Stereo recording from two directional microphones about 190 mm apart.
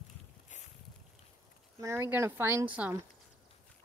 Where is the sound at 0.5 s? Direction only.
40° left (ahead or behind).